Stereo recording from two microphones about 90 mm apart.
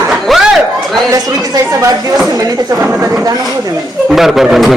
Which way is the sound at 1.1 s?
35° right (ahead or behind).